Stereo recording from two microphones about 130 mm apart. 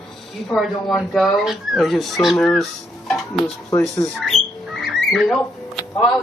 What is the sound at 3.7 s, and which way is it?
Speech, 25° left (ahead or behind).